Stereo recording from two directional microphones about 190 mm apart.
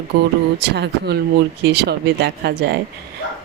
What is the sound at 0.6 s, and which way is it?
Speech, 60° right (ahead or behind).